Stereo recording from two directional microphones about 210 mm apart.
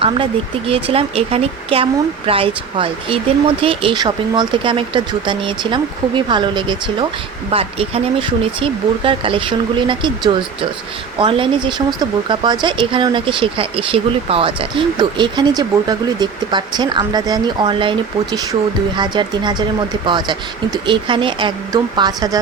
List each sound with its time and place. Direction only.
0.7 s speech: 25° right (ahead or behind)